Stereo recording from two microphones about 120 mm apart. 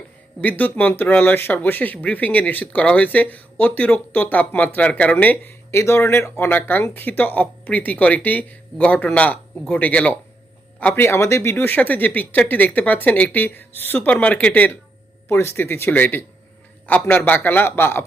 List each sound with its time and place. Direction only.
0.4 s speech: 15° left (ahead or behind)